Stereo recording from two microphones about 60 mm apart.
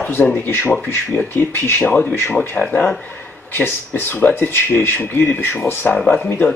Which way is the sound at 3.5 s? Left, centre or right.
Left.